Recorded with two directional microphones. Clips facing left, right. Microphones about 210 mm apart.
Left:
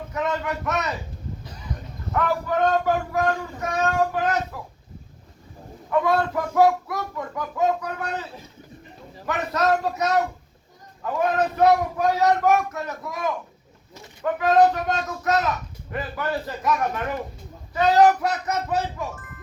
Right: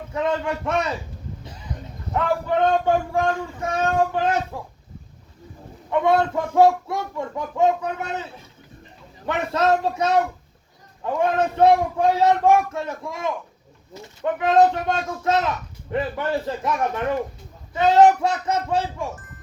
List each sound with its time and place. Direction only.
0.1 s speech: 30° right (ahead or behind)
2.1 s speech: 25° right (ahead or behind)
5.9 s speech: 25° right (ahead or behind)
9.2 s speech: 25° right (ahead or behind)
17.7 s speech: 25° right (ahead or behind)